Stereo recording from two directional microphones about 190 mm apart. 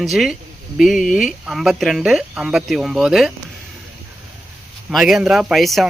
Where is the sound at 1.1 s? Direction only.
45° left (ahead or behind).